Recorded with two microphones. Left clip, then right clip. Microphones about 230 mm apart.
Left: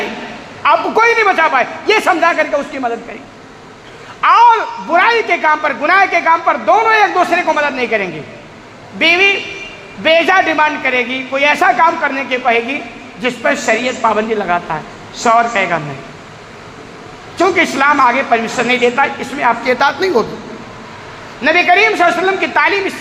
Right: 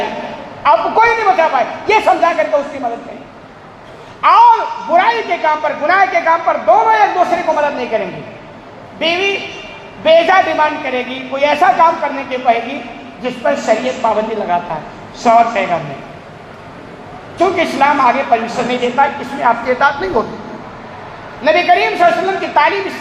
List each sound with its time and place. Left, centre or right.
0.6 s a man's voice: left
4.2 s a man's voice: left
17.3 s a man's voice: left
21.4 s a man's voice: left